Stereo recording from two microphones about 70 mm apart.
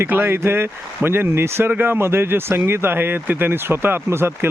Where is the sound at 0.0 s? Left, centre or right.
Right.